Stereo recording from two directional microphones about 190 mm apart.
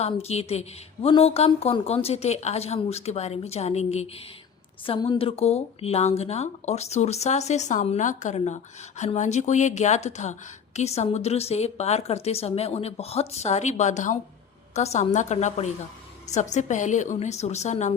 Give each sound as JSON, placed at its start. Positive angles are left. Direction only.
{"t": 0.0, "sound": "speech", "side_deg": 35}